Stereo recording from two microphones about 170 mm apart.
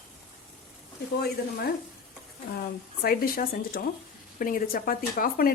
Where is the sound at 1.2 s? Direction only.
70° left (ahead or behind).